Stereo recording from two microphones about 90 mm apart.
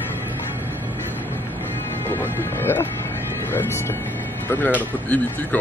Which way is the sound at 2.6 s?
25° left (ahead or behind).